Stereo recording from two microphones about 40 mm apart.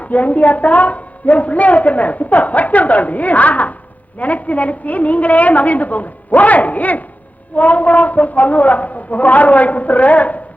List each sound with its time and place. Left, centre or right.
0.0 s a woman's voice: left